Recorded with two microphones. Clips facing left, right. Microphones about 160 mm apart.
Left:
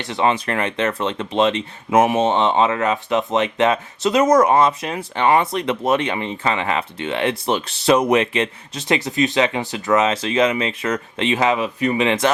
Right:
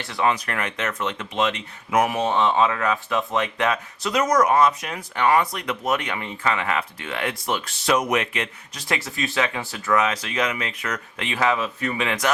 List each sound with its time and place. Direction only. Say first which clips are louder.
0.0 s speech: left 4 dB; 25° left (ahead or behind)